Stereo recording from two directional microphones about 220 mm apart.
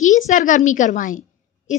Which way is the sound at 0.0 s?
35° left (ahead or behind).